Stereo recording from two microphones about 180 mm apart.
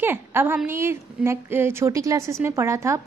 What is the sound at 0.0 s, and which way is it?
A woman's voice, 10° right (ahead or behind).